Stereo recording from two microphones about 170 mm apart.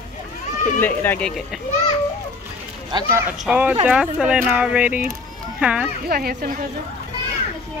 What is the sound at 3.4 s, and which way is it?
Speech, 10° right (ahead or behind).